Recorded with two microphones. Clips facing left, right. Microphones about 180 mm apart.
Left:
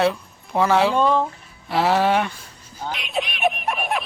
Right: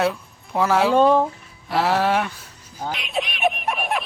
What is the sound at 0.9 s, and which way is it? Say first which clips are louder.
Speech: right 3 dB; 45° right (ahead or behind).